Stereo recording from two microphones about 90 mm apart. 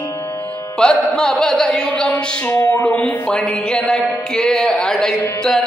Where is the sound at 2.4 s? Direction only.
20° left (ahead or behind).